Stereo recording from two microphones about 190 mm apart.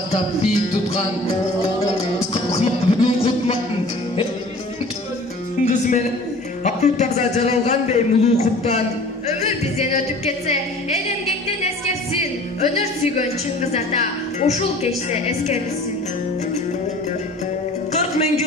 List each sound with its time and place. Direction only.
2.3 s music: 30° left (ahead or behind)
5.7 s music: 40° left (ahead or behind)
6.6 s speech: 35° left (ahead or behind)
12.2 s a woman's voice: 35° left (ahead or behind)